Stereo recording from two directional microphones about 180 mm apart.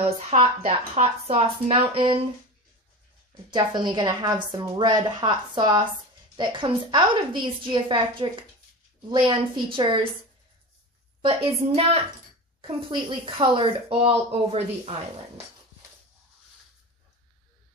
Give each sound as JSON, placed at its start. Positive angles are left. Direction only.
{"t": 0.0, "sound": "speech", "side_deg": -30}
{"t": 3.4, "sound": "a woman's voice", "side_deg": -25}
{"t": 11.2, "sound": "a woman's voice", "side_deg": -30}